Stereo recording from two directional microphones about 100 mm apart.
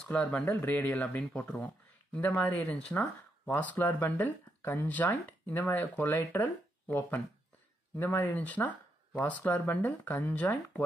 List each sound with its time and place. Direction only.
0.0 s speech: 15° left (ahead or behind)